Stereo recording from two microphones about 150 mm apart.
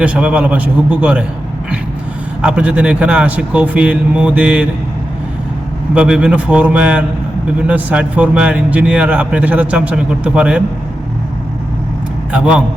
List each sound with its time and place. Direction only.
0.0 s speech: 10° right (ahead or behind)
2.4 s speech: 10° right (ahead or behind)
5.9 s speech: 5° right (ahead or behind)
12.3 s speech: 5° right (ahead or behind)